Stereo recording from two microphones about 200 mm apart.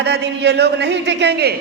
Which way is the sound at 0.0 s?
55° right (ahead or behind).